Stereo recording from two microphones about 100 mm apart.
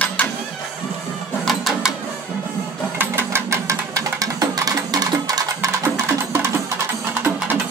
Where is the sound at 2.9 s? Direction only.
25° right (ahead or behind); by 5.7 s 40° right (ahead or behind).